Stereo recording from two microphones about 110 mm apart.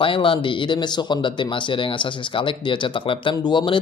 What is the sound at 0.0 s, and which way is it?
Speech, 55° left (ahead or behind).